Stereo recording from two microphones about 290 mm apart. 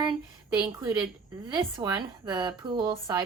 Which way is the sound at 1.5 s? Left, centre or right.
Centre.